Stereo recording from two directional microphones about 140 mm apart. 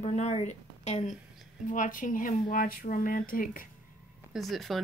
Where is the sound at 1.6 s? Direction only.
70° left (ahead or behind).